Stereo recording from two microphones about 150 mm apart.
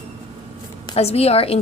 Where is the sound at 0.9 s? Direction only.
45° left (ahead or behind).